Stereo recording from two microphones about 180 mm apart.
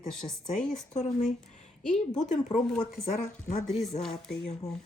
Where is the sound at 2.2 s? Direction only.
40° left (ahead or behind).